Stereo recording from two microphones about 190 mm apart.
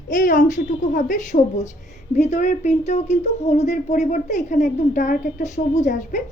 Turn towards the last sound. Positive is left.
turn(degrees=40)  # may be behind; listen again after turning